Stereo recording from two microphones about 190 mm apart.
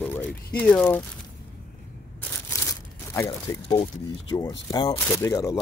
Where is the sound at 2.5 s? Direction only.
15° left (ahead or behind).